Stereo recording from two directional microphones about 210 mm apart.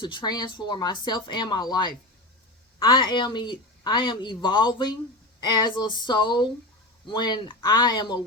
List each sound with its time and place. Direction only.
0.0 s speech: 20° left (ahead or behind)